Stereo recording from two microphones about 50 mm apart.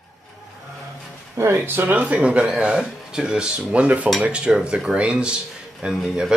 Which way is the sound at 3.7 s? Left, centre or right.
Right.